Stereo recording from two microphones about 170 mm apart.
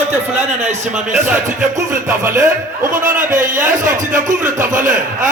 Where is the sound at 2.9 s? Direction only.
50° right (ahead or behind).